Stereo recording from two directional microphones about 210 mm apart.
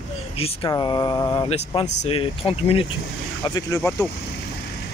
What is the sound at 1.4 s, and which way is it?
Speech, 30° left (ahead or behind).